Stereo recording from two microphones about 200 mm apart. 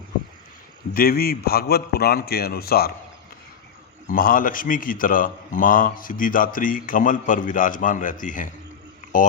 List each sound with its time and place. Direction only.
0.9 s a man's voice: 50° left (ahead or behind)
4.1 s a man's voice: 45° left (ahead or behind)